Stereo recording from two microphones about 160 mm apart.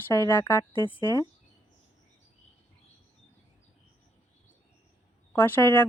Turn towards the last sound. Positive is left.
turn(degrees=15)  # may be behind; listen again after turning